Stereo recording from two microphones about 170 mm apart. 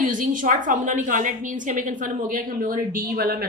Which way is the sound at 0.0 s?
50° right (ahead or behind).